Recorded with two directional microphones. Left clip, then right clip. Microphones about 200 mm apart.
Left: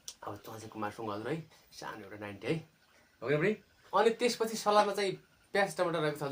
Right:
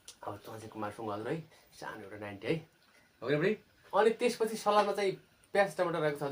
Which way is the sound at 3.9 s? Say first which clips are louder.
Even; 20° left (ahead or behind).